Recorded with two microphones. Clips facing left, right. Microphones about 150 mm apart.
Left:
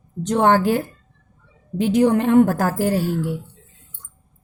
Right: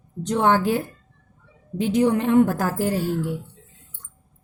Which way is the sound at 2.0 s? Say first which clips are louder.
Left 3 dB; 55° left (ahead or behind).